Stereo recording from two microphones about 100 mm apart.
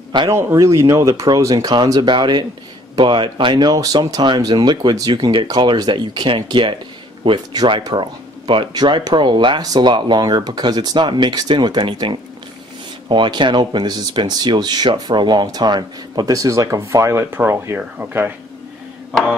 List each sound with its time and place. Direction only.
0.3 s speech: 25° right (ahead or behind)